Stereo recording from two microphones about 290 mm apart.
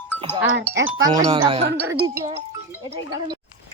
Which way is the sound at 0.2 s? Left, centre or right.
Centre.